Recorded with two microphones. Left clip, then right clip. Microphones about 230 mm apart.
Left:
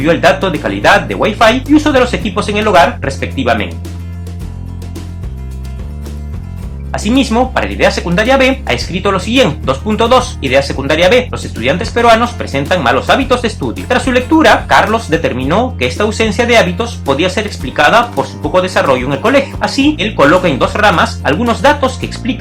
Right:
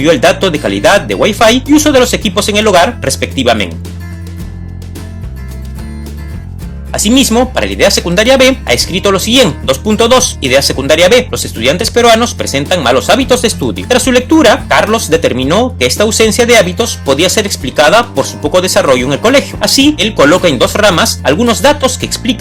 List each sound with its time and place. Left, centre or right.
0.0 s speech: right
6.9 s speech: right